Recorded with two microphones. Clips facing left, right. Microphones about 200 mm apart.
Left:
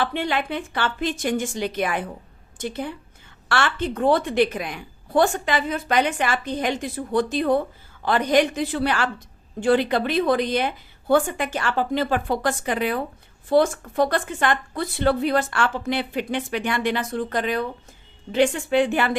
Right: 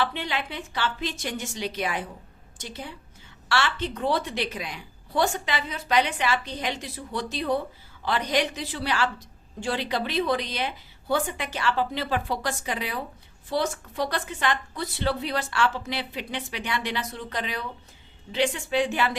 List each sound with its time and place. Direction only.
0.0 s a woman's voice: 50° left (ahead or behind)